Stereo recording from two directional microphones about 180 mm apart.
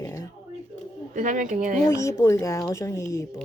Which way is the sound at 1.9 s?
15° left (ahead or behind).